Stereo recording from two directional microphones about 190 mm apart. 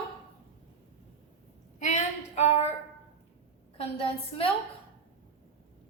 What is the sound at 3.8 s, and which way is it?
Speech, 30° left (ahead or behind).